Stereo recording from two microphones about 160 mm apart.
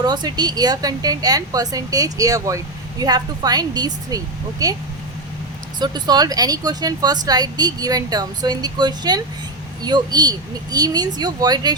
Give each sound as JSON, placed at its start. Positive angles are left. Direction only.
{"t": 0.0, "sound": "speech", "side_deg": -25}
{"t": 5.8, "sound": "speech", "side_deg": -25}